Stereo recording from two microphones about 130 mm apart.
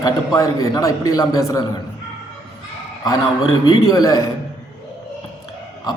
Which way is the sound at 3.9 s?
25° left (ahead or behind).